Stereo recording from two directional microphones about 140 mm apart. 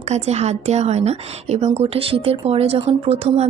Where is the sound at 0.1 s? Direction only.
50° right (ahead or behind).